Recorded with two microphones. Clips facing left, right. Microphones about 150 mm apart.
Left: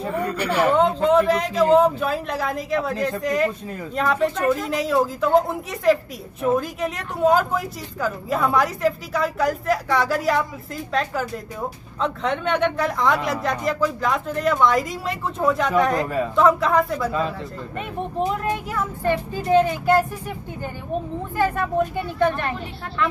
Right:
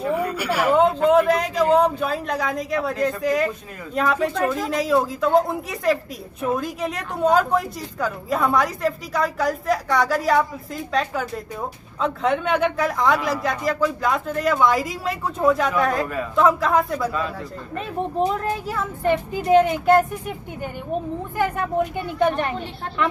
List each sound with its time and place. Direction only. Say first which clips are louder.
0.1 s a woman's voice: left 1 dB; 10° right (ahead or behind)
19.0 s speech: right 3 dB; 15° right (ahead or behind)